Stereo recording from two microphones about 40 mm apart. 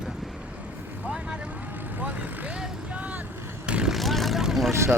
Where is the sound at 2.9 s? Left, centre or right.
Right.